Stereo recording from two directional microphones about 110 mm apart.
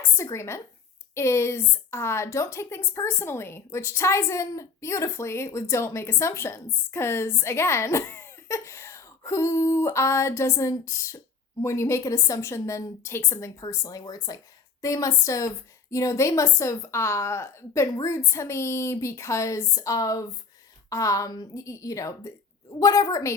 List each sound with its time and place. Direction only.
0.2 s a woman's voice: 25° left (ahead or behind)